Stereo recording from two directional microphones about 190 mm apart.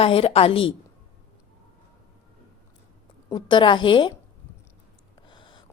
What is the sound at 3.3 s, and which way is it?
Speech, 25° left (ahead or behind).